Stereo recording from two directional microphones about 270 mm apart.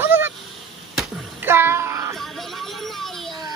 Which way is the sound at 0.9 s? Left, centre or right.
Centre.